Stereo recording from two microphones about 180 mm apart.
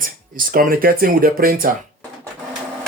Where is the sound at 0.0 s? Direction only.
50° right (ahead or behind).